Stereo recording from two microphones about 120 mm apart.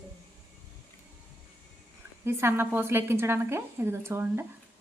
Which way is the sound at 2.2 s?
20° right (ahead or behind).